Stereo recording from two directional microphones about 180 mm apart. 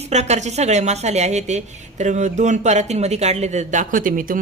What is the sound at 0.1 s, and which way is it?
Speech, 40° right (ahead or behind).